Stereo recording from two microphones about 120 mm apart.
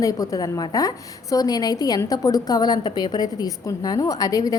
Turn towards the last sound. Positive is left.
turn(degrees=30)  # may be behind; listen again after turning